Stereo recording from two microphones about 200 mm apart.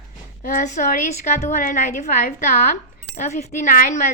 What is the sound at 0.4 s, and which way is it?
Speech, 40° left (ahead or behind).